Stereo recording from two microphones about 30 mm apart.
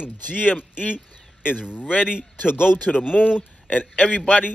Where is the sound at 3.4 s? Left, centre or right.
Left.